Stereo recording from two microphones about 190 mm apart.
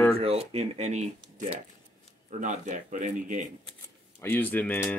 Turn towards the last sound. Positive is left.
turn(degrees=10)  # may be behind; listen again after turning